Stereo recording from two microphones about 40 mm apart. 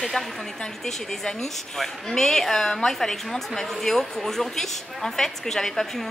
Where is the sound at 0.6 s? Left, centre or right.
Centre.